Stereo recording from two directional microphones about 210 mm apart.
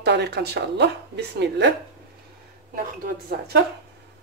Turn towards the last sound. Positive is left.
turn(degrees=-45)  # may be behind; listen again after turning